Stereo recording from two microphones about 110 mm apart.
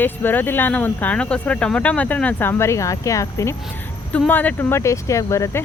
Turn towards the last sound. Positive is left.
turn(degrees=25)  # may be behind; listen again after turning